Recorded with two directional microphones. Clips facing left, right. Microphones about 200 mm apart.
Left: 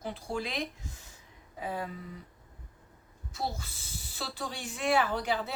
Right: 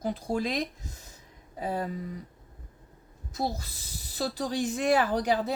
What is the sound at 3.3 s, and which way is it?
Speech, 40° right (ahead or behind).